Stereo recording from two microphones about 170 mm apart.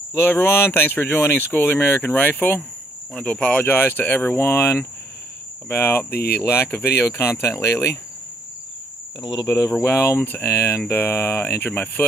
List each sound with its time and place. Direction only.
0.1 s speech: 10° left (ahead or behind)
6.0 s speech: 65° left (ahead or behind)
6.4 s speech: 15° left (ahead or behind)
9.2 s speech: 20° left (ahead or behind)